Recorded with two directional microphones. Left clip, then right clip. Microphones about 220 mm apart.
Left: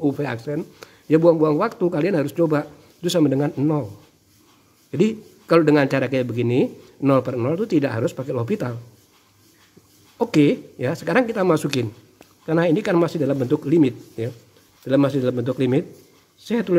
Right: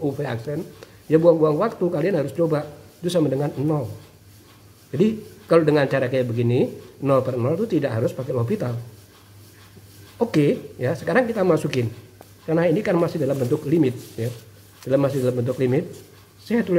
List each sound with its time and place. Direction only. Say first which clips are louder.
0.0 s speech: left 2 dB; 45° left (ahead or behind)
4.9 s speech: even; 45° left (ahead or behind)
10.1 s speech: left 2 dB; 45° left (ahead or behind)